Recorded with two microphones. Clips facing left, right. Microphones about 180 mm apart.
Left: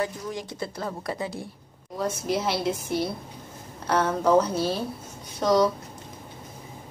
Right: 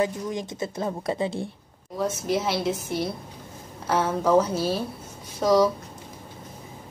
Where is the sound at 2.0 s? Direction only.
Centre (ahead or behind).